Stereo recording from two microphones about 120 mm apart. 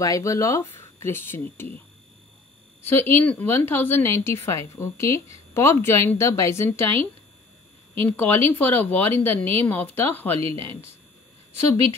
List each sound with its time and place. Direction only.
0.0 s a woman's voice: 25° left (ahead or behind)
2.8 s a woman's voice: 20° left (ahead or behind)
8.2 s speech: 15° left (ahead or behind)